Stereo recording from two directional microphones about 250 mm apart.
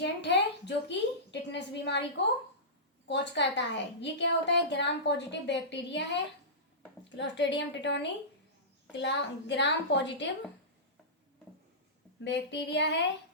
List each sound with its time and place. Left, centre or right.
0.0 s a woman's voice: left
3.1 s a woman's voice: left
12.2 s a woman's voice: left